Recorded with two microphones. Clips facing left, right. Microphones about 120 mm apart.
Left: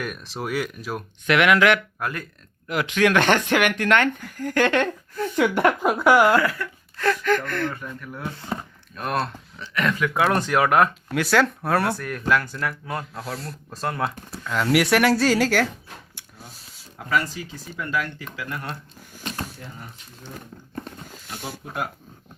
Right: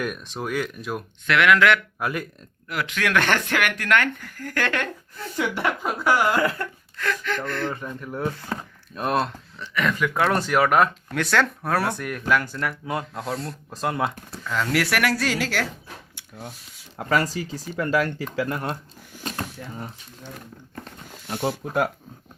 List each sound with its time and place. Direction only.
0.0 s speech: 5° left (ahead or behind)
1.3 s speech: 20° left (ahead or behind)
2.0 s speech: 10° right (ahead or behind)
2.6 s speech: 20° left (ahead or behind)
5.4 s speech: 60° left (ahead or behind)
6.4 s speech: 25° right (ahead or behind)
6.9 s speech: 35° left (ahead or behind); by 7.7 s 55° left (ahead or behind)
7.7 s speech: 25° right (ahead or behind)
9.2 s speech: centre (ahead or behind)
10.3 s speech: 5° right (ahead or behind)
11.1 s speech: 5° left (ahead or behind); by 15.6 s 45° left (ahead or behind)
17.1 s speech: 35° right (ahead or behind)